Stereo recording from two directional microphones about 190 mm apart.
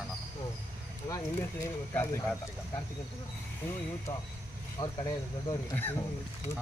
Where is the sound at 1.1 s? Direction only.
15° left (ahead or behind).